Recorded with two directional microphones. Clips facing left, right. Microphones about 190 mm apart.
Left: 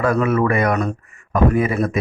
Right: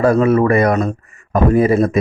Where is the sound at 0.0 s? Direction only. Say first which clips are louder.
Right 5 dB; 35° right (ahead or behind).